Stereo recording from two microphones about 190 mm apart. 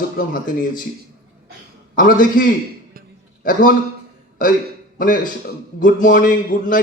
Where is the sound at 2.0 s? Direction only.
45° left (ahead or behind).